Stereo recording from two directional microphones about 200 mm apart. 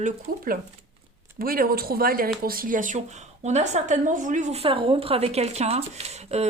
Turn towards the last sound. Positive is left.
turn(degrees=-35)  # may be behind; listen again after turning